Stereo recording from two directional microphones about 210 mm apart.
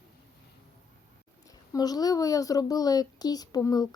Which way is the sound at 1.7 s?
20° left (ahead or behind).